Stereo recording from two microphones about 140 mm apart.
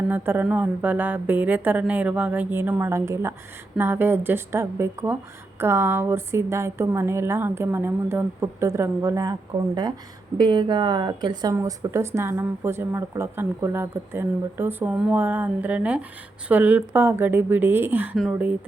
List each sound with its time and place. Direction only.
0.1 s speech: 15° right (ahead or behind)
10.3 s a woman's voice: 30° right (ahead or behind); by 18.5 s 10° right (ahead or behind)